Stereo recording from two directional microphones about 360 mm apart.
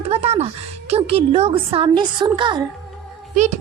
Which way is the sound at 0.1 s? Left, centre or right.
Centre.